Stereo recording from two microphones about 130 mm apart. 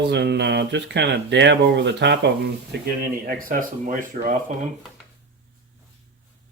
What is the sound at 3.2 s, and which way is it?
Speech, 90° right.